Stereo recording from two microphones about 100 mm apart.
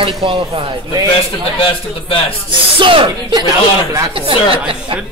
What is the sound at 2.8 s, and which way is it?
Speech, 60° right (ahead or behind).